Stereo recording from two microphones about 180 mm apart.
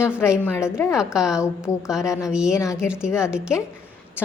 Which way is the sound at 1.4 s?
15° left (ahead or behind).